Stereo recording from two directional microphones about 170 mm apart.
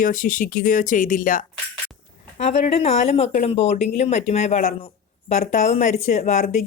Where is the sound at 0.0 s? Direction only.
50° left (ahead or behind).